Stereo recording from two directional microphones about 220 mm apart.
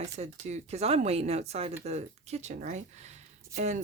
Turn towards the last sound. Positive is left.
turn(degrees=-30)  # may be behind; listen again after turning